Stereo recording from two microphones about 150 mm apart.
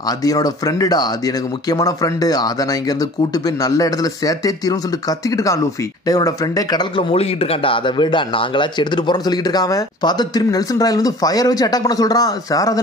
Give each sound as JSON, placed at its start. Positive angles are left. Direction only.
{"t": 0.2, "sound": "speech", "side_deg": 25}
{"t": 7.1, "sound": "speech", "side_deg": 35}